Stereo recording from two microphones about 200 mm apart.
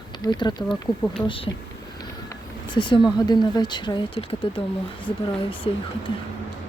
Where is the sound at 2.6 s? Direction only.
25° left (ahead or behind).